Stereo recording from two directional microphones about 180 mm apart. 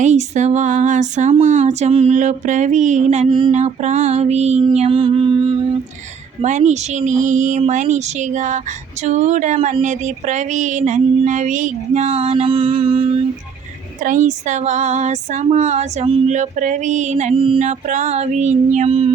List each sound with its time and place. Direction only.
0.0 s female singing: 40° right (ahead or behind)
3.2 s a sound: 25° right (ahead or behind)
3.5 s female singing: 40° right (ahead or behind)
6.4 s female singing: 40° right (ahead or behind)
14.0 s female singing: 45° right (ahead or behind)